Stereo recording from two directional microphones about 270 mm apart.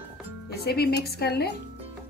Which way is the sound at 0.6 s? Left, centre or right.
Left.